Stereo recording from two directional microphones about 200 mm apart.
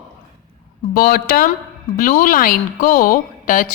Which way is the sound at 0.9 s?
45° left (ahead or behind).